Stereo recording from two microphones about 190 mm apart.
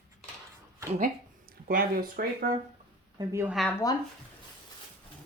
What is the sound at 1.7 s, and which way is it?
Speech, 45° right (ahead or behind).